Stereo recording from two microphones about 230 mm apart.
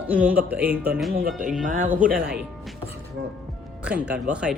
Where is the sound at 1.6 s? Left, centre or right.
Right.